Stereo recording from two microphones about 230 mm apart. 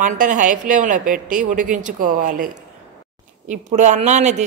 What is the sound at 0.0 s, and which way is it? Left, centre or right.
Speech, right.